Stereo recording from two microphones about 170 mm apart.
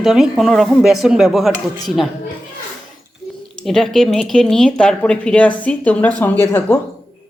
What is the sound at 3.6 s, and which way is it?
Speech, centre (ahead or behind).